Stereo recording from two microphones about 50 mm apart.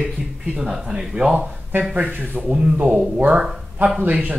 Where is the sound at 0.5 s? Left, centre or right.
Centre.